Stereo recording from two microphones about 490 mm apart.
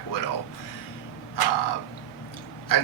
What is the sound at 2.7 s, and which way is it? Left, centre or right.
Speech, left.